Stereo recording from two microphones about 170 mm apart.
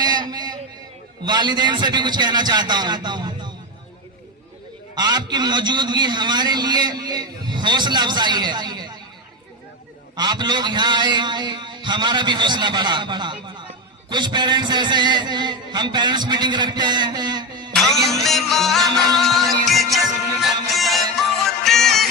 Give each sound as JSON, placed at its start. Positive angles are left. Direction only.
{"t": 0.0, "sound": "a sound", "side_deg": -25}
{"t": 1.2, "sound": "a man's voice", "side_deg": -25}
{"t": 4.9, "sound": "a man's voice", "side_deg": -25}
{"t": 10.2, "sound": "a man's voice", "side_deg": -25}
{"t": 17.7, "sound": "music", "side_deg": 0}